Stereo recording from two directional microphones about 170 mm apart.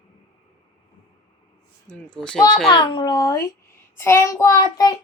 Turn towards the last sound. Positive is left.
turn(degrees=20)  # may be behind; listen again after turning